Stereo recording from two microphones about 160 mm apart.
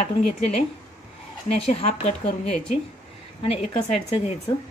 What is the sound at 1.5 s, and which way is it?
Speech, 40° left (ahead or behind).